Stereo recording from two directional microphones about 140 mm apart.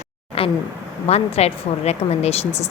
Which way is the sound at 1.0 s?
50° left (ahead or behind).